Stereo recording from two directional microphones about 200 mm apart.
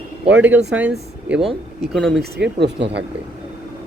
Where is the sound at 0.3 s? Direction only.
10° right (ahead or behind).